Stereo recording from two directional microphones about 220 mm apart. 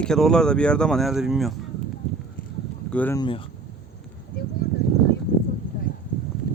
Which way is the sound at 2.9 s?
10° left (ahead or behind).